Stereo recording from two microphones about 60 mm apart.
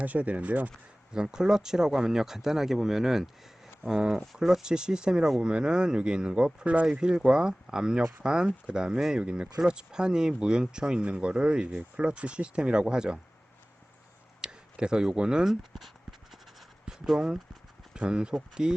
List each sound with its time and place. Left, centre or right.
0.0 s speech: right
1.1 s speech: centre
9.2 s speech: centre
14.4 s speech: centre
16.8 s speech: centre